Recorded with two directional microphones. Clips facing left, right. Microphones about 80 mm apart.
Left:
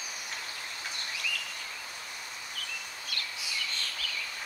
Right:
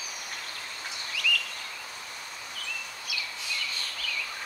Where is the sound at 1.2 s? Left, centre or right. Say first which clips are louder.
Right 8 dB; left.